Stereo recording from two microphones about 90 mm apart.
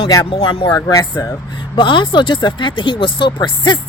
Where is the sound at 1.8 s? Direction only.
65° left (ahead or behind).